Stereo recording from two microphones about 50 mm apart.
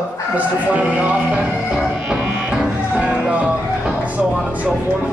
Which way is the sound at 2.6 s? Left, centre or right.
Centre.